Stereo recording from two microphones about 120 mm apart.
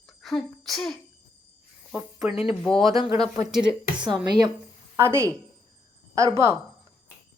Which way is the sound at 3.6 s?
40° right (ahead or behind).